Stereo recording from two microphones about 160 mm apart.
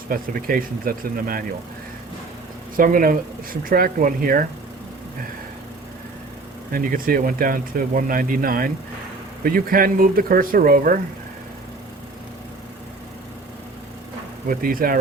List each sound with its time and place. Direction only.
0.1 s speech: 60° right (ahead or behind)
2.7 s speech: 60° right (ahead or behind)
6.7 s speech: 60° right (ahead or behind)
14.4 s speech: 60° right (ahead or behind)